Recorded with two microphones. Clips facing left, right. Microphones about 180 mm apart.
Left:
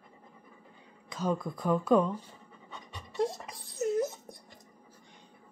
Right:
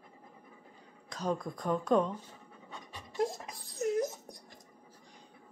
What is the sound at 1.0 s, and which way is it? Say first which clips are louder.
Speech: left 2 dB; centre (ahead or behind).